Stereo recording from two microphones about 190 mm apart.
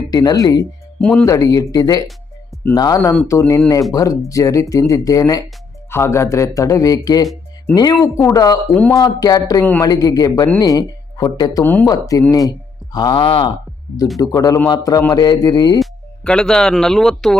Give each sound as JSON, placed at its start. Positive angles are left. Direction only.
{"t": 0.1, "sound": "speech", "side_deg": 20}
{"t": 8.7, "sound": "speech", "side_deg": 5}
{"t": 9.0, "sound": "speech", "side_deg": 20}
{"t": 11.6, "sound": "speech", "side_deg": 10}
{"t": 15.8, "sound": "speech", "side_deg": 5}